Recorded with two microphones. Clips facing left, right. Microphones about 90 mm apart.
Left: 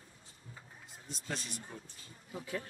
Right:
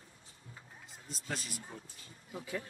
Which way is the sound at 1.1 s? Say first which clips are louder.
Even; 5° right (ahead or behind).